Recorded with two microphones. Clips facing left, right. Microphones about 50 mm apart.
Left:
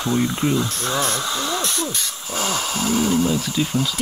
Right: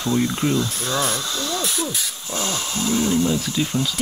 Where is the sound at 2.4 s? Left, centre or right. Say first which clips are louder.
Left 2 dB; left.